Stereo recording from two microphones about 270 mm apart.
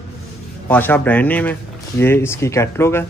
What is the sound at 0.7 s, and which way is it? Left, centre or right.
A man's voice, centre.